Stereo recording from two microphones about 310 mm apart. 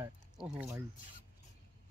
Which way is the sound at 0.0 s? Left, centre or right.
Centre.